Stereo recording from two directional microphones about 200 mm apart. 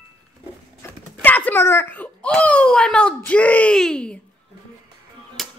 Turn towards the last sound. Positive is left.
turn(degrees=0)  # may be behind; listen again after turning